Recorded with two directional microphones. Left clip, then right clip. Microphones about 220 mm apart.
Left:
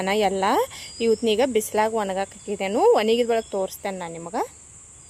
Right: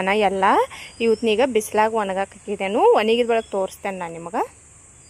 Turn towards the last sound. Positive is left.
turn(degrees=0)  # may be behind; listen again after turning